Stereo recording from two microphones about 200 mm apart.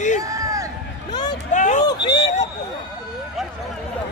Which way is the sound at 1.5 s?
40° left (ahead or behind).